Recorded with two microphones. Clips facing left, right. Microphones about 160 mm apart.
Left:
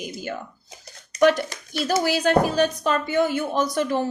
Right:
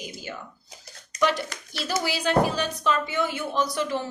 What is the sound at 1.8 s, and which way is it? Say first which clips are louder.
Speech: left 6 dB; 50° left (ahead or behind).